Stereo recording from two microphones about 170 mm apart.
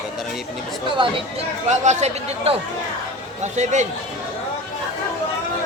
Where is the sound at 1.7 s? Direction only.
45° right (ahead or behind).